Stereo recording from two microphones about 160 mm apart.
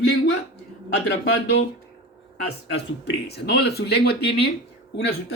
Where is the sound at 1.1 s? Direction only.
90° left.